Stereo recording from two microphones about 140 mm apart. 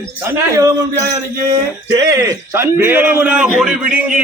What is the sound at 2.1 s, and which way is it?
A man's voice, 20° right (ahead or behind).